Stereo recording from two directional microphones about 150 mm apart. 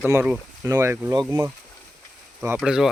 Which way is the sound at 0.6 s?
20° right (ahead or behind).